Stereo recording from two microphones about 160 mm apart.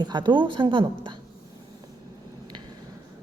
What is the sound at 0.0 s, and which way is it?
A woman's voice, 25° right (ahead or behind).